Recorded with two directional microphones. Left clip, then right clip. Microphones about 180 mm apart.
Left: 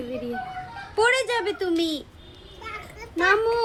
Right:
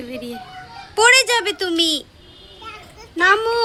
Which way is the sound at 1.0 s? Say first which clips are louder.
Right 8 dB; 15° right (ahead or behind).